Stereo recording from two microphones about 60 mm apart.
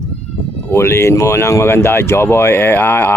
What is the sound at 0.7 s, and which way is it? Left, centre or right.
Speech, left.